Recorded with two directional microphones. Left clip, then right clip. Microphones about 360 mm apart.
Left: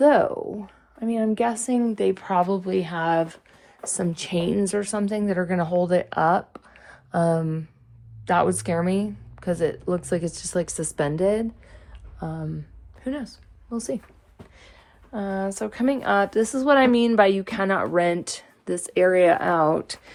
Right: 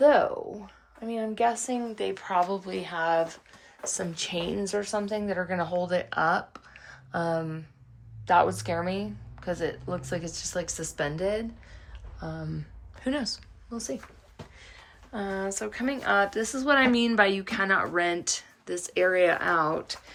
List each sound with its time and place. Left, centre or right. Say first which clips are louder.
0.0 s speech: left 3 dB; centre
12.5 s speech: left 1 dB; centre
13.7 s speech: left 6 dB; centre
15.1 s speech: left 3 dB; centre